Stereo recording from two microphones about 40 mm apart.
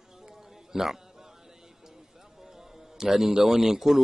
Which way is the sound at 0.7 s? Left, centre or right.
Centre.